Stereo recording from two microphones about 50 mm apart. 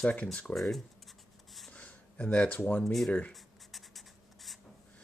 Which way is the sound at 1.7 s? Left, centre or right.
Left.